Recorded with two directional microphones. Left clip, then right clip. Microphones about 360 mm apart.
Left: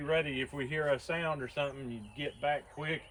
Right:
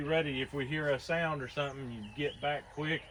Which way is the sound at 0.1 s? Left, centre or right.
Centre.